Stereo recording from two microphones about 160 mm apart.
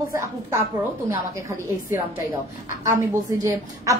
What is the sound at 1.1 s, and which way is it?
Speech, 20° right (ahead or behind).